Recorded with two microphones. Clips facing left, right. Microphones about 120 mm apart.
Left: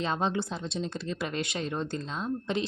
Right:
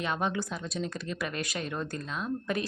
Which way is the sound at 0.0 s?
30° left (ahead or behind).